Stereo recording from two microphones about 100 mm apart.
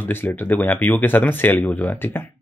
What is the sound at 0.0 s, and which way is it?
Speech, 20° left (ahead or behind).